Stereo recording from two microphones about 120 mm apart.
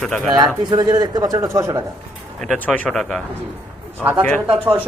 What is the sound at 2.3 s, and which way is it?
Speech, 5° left (ahead or behind).